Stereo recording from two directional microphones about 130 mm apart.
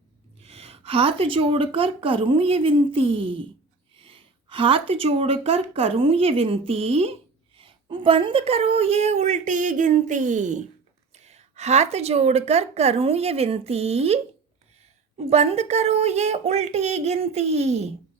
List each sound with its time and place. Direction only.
0.3 s a woman's voice: 50° right (ahead or behind); by 10.6 s 70° right (ahead or behind)
11.1 s speech: 60° right (ahead or behind)
15.2 s a woman's voice: 50° right (ahead or behind)